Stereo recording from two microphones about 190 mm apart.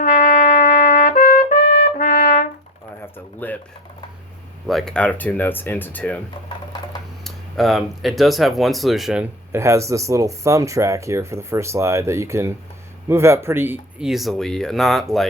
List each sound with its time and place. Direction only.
0.0 s trumpet: 45° left (ahead or behind)
3.4 s a sound: 10° left (ahead or behind)
4.7 s speech: 5° left (ahead or behind)
7.3 s speech: centre (ahead or behind)
9.5 s speech: 15° right (ahead or behind); by 15.0 s centre (ahead or behind)